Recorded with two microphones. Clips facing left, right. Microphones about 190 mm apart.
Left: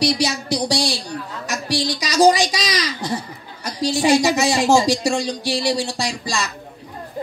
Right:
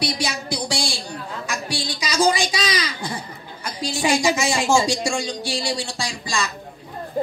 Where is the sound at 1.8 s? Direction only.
40° left (ahead or behind).